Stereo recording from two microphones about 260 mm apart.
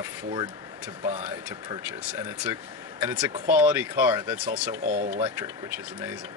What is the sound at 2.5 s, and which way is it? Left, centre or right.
Speech, centre.